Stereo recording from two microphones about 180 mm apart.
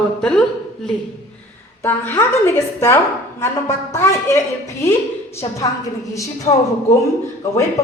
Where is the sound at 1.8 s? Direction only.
15° left (ahead or behind).